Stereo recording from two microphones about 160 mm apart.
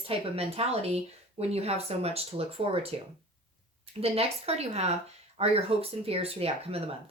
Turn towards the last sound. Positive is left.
turn(degrees=-40)  # may be behind; listen again after turning